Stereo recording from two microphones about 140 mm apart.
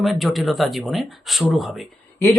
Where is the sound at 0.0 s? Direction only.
Centre (ahead or behind).